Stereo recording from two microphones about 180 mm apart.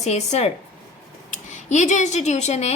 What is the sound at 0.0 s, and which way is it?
A woman's voice, 40° left (ahead or behind).